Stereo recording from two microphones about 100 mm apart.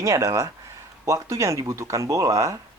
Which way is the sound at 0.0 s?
35° right (ahead or behind).